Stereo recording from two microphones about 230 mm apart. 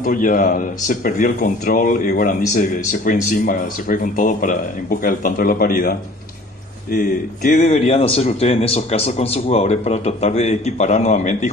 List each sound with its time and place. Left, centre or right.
0.0 s speech: left